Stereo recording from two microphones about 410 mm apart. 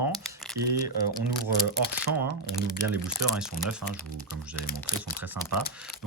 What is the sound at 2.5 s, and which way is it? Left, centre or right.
Speech, centre.